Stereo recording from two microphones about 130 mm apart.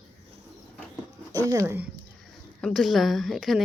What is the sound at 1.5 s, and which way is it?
Speech, 20° right (ahead or behind).